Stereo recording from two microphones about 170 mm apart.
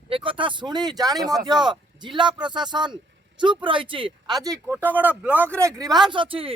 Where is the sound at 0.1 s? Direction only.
30° right (ahead or behind).